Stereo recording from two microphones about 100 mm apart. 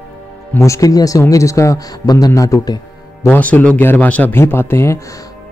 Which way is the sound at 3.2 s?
15° left (ahead or behind).